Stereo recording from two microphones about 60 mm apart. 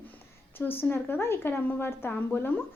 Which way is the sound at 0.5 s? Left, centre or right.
Left.